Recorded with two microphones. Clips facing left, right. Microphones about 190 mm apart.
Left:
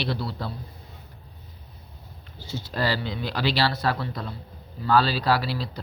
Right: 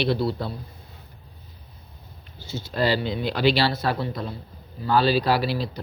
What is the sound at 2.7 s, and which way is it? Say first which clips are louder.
Speech: right 4 dB; 20° right (ahead or behind).